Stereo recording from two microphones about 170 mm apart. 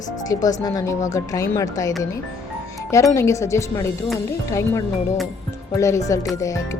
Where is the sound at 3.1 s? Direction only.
15° left (ahead or behind).